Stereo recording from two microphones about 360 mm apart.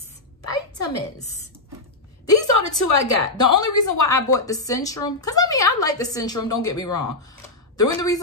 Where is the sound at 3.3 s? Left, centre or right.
Left.